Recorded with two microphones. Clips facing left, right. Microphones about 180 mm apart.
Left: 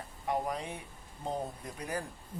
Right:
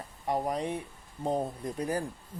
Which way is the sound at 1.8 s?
35° right (ahead or behind).